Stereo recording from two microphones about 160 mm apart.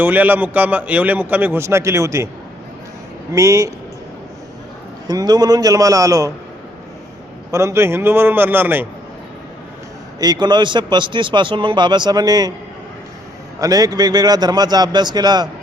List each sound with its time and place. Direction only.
0.0 s a man's voice: 10° right (ahead or behind)
3.3 s a man's voice: 20° right (ahead or behind)
5.0 s a man's voice: 25° right (ahead or behind)
7.5 s a man's voice: 15° right (ahead or behind)
10.2 s a man's voice: 25° right (ahead or behind)
13.6 s a man's voice: 20° right (ahead or behind)